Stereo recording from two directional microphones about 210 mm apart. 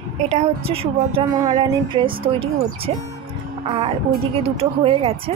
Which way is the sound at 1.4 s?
20° right (ahead or behind).